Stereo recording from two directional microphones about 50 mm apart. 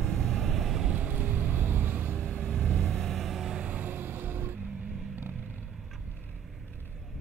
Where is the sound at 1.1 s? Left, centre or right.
Right.